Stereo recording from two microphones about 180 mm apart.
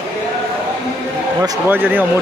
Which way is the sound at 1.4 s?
15° right (ahead or behind).